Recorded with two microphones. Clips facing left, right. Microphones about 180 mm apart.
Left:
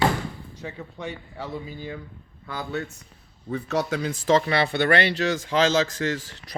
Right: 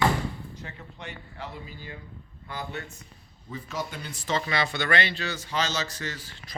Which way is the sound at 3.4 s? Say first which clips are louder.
Left 9 dB; 70° left (ahead or behind).